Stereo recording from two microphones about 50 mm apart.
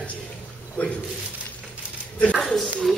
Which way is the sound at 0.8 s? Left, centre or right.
Left.